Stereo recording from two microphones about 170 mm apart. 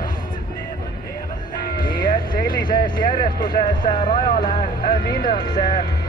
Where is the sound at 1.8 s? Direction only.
55° left (ahead or behind).